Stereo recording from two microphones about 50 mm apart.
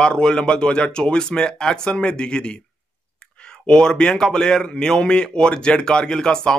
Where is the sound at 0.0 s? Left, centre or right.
Centre.